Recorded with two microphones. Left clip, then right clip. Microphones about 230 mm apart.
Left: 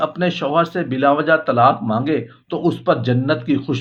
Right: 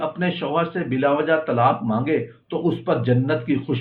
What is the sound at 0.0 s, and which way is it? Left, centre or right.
Speech, left.